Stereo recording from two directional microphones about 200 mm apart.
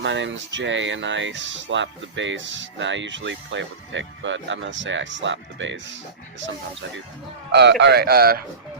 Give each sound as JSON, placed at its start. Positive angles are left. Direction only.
{"t": 0.0, "sound": "speech", "side_deg": -65}
{"t": 7.5, "sound": "speech", "side_deg": -60}